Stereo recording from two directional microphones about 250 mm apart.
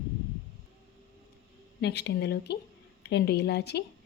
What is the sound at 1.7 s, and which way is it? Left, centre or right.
A woman's voice, left.